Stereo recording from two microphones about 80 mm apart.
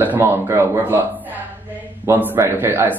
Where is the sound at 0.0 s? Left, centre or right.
Right.